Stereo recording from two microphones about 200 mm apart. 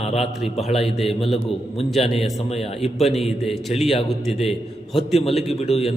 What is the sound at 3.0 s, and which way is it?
Speech, centre (ahead or behind).